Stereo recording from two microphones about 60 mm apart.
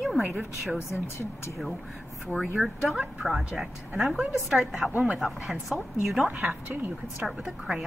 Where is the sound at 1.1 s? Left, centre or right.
Left.